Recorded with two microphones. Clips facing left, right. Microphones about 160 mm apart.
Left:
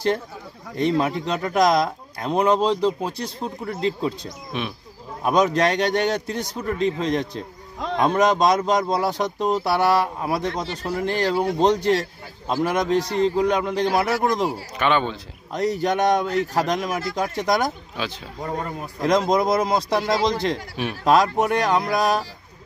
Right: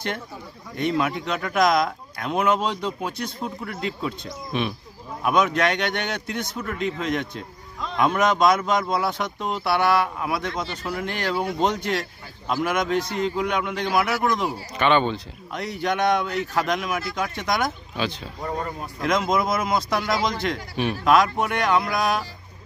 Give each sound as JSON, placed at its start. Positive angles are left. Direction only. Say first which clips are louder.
{"t": 0.7, "sound": "a man's voice", "louder": "left 3 dB", "side_deg": 35}
{"t": 4.5, "sound": "speech", "louder": "right 3 dB", "side_deg": 0}
{"t": 5.2, "sound": "a man's voice", "louder": "left 2 dB", "side_deg": 35}
{"t": 14.5, "sound": "speech", "louder": "right 1 dB", "side_deg": 5}
{"t": 15.5, "sound": "a man's voice", "louder": "left 4 dB", "side_deg": 40}
{"t": 17.9, "sound": "speech", "louder": "right 2 dB", "side_deg": 0}
{"t": 18.9, "sound": "a man's voice", "louder": "left 3 dB", "side_deg": 35}
{"t": 20.7, "sound": "speech", "louder": "right 2 dB", "side_deg": 0}
{"t": 21.0, "sound": "a man's voice", "louder": "left 2 dB", "side_deg": 35}